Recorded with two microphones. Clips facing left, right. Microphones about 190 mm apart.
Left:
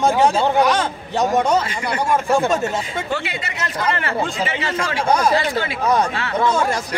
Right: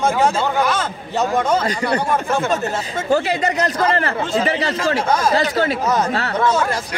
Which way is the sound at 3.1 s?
40° right (ahead or behind).